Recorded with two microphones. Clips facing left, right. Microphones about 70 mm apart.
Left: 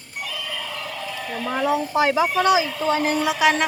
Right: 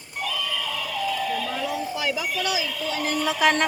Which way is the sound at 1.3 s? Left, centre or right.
Left.